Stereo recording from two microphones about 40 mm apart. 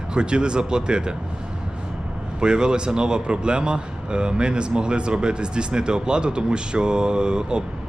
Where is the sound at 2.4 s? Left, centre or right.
Right.